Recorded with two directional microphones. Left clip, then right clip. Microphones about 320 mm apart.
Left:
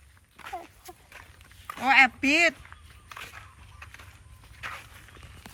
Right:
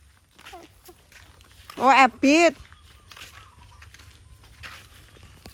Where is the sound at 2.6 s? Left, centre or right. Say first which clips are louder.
Left 2 dB; centre.